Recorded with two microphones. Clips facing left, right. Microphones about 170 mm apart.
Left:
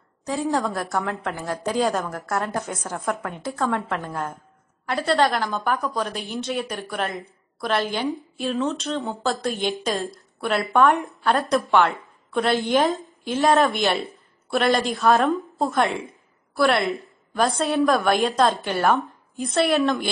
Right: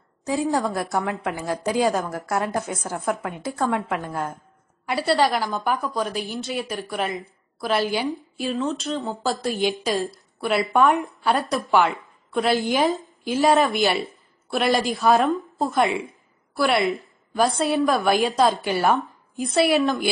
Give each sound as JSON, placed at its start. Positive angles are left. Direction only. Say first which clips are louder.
{"t": 0.5, "sound": "a woman's voice", "louder": "left 2 dB", "side_deg": -10}
{"t": 1.0, "sound": "a woman's voice", "louder": "right 1 dB", "side_deg": 0}
{"t": 1.3, "sound": "a woman's voice", "louder": "right 2 dB", "side_deg": -15}
{"t": 1.8, "sound": "a woman's voice", "louder": "right 1 dB", "side_deg": -5}